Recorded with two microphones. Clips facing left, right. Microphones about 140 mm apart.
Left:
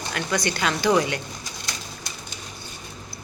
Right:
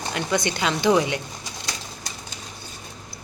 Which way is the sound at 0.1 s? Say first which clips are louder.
Right 1 dB; 20° right (ahead or behind).